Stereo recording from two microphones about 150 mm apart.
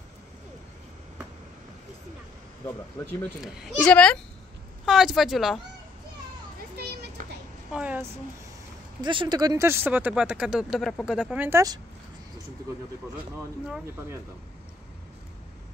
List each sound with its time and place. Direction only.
2.6 s speech: 15° left (ahead or behind)
3.3 s a child's voice: 5° right (ahead or behind)
6.9 s children playing: 90° right
7.7 s speech: 10° right (ahead or behind)
9.0 s speech: 30° right (ahead or behind); by 11.6 s 15° right (ahead or behind)